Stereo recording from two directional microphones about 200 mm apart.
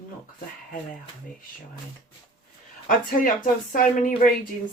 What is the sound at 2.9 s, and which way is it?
Speech, 45° left (ahead or behind).